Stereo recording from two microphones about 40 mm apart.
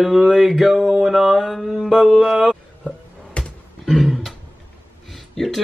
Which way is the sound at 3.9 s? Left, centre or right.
Centre.